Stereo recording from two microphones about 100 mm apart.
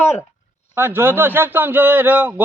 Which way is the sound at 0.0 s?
30° left (ahead or behind).